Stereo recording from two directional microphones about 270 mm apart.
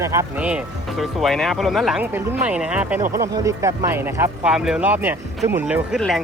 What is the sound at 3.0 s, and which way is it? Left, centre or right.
Speech, right.